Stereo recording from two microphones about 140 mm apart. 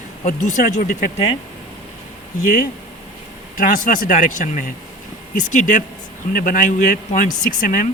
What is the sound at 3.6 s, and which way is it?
Speech, 65° left (ahead or behind).